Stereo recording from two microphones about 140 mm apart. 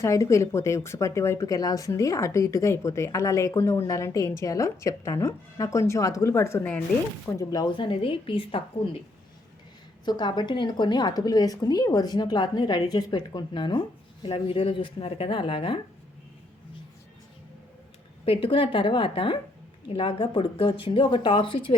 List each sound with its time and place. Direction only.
0.0 s speech: 20° left (ahead or behind)
7.3 s a woman's voice: 25° left (ahead or behind)
10.1 s a woman's voice: 30° left (ahead or behind)
18.3 s a woman's voice: 40° left (ahead or behind)